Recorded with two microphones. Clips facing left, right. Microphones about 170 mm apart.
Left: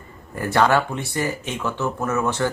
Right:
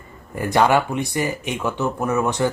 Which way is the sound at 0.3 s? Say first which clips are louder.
Right 1 dB; 15° right (ahead or behind).